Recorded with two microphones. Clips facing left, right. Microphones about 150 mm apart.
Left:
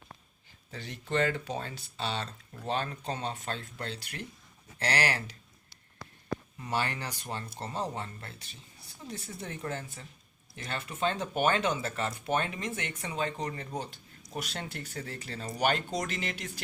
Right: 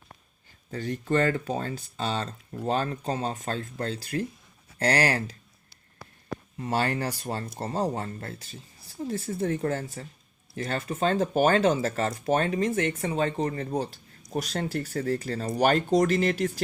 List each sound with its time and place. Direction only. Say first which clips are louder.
0.7 s speech: right 7 dB; 45° right (ahead or behind)
6.6 s speech: right 8 dB; 45° right (ahead or behind)